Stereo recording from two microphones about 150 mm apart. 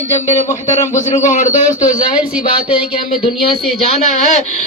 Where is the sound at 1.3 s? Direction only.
55° left (ahead or behind).